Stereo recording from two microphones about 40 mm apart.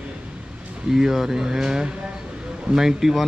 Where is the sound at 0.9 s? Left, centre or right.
Centre.